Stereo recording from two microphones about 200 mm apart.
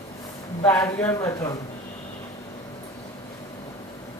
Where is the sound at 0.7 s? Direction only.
15° left (ahead or behind).